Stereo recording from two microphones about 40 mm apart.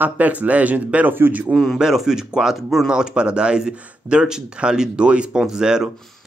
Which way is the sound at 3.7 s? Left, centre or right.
Right.